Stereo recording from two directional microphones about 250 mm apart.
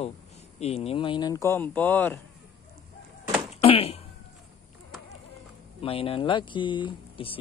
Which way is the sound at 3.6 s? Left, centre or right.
Left.